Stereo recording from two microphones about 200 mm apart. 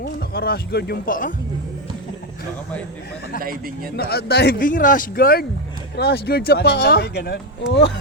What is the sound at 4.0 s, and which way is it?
Speech, 50° left (ahead or behind).